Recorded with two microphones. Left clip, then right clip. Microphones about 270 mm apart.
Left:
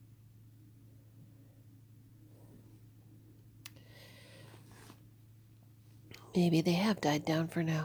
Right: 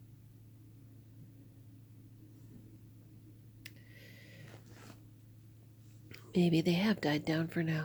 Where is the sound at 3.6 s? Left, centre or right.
Left.